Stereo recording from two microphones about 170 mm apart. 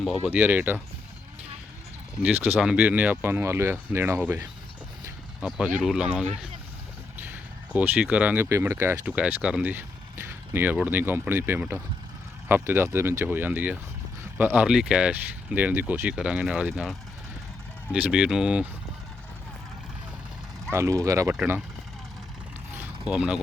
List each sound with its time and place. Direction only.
0.3 s speech: 10° right (ahead or behind)
2.2 s speech: 10° right (ahead or behind)
7.7 s speech: 5° right (ahead or behind)
20.7 s speech: 15° right (ahead or behind)
22.7 s mechanisms: 10° right (ahead or behind)